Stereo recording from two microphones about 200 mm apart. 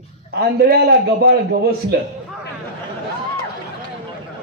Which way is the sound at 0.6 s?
50° right (ahead or behind).